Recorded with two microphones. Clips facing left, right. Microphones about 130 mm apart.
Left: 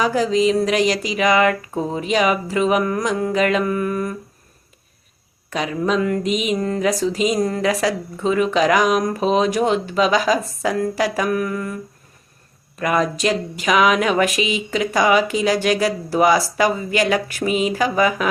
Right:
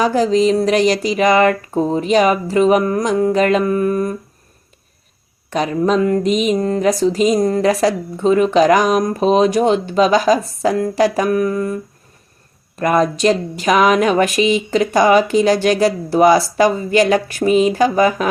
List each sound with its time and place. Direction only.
0.0 s a woman's voice: 30° right (ahead or behind)
5.5 s a woman's voice: 30° right (ahead or behind)
12.8 s speech: 35° right (ahead or behind)